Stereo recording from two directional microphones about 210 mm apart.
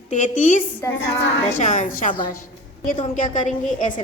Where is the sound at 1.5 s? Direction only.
35° left (ahead or behind).